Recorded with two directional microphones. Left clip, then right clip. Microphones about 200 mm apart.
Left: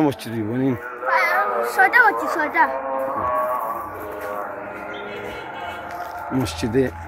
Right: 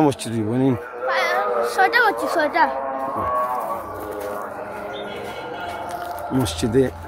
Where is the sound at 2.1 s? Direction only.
50° right (ahead or behind).